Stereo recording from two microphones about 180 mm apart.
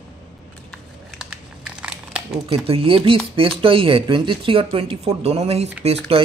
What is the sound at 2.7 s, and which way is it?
Speech, 30° right (ahead or behind).